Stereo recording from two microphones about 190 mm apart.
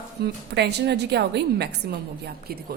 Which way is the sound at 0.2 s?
60° right (ahead or behind).